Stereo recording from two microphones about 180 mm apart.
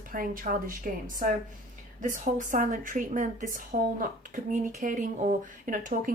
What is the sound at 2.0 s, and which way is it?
Speech, 45° right (ahead or behind).